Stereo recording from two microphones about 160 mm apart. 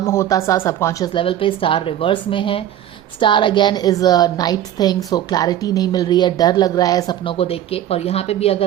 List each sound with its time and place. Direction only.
0.0 s speech: 15° left (ahead or behind)
1.1 s a woman's voice: 35° left (ahead or behind)